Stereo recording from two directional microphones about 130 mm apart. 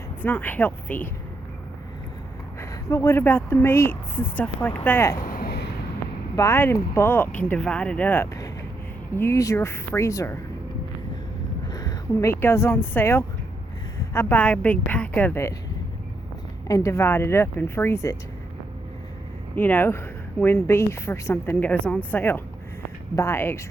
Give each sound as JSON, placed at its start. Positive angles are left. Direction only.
{"t": 0.2, "sound": "speech", "side_deg": 15}
{"t": 2.6, "sound": "speech", "side_deg": 20}
{"t": 6.3, "sound": "speech", "side_deg": 20}
{"t": 11.7, "sound": "speech", "side_deg": 30}
{"t": 16.6, "sound": "speech", "side_deg": 25}
{"t": 19.5, "sound": "speech", "side_deg": 15}